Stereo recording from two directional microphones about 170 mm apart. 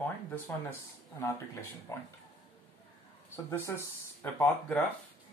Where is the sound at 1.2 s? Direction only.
15° left (ahead or behind).